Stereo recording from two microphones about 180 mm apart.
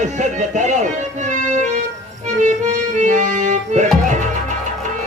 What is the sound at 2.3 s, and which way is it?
Accordion, 45° right (ahead or behind).